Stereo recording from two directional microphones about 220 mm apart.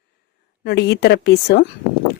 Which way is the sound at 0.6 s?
50° left (ahead or behind).